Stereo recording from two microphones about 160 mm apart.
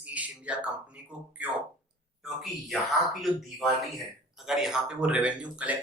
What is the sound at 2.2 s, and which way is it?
Speech, centre (ahead or behind).